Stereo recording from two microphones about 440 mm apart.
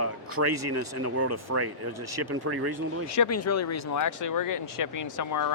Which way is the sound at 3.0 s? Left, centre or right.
Left.